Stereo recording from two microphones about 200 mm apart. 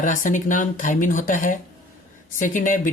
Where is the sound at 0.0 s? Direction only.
40° left (ahead or behind).